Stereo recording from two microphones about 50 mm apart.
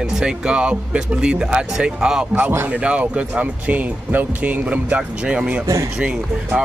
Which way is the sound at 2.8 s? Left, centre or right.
Right.